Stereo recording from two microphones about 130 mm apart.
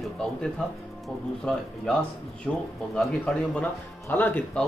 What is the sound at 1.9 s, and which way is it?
A man's voice, 5° left (ahead or behind).